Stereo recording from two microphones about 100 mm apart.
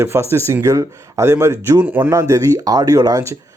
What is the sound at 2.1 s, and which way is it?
Speech, 30° right (ahead or behind).